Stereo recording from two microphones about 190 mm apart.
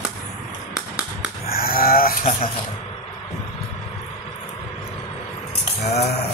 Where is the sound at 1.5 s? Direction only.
50° left (ahead or behind).